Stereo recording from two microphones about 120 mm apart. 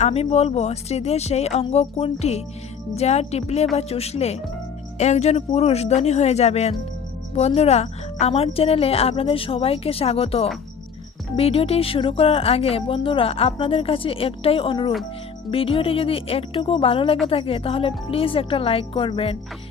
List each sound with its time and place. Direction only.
0.0 s speech: 65° left (ahead or behind)